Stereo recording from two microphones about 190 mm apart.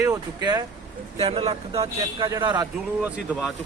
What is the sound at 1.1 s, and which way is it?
A man's voice, 30° right (ahead or behind).